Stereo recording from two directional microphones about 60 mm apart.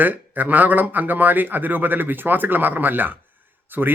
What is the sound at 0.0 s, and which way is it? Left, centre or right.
Speech, right.